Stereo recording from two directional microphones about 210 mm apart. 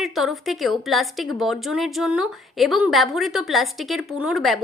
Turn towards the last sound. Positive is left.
turn(degrees=0)  # may be behind; listen again after turning